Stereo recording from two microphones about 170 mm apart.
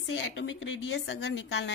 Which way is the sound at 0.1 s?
90° left.